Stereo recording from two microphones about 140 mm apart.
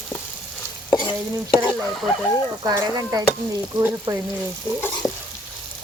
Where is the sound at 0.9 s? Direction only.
30° left (ahead or behind).